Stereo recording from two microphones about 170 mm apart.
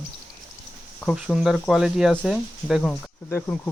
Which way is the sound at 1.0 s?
5° right (ahead or behind).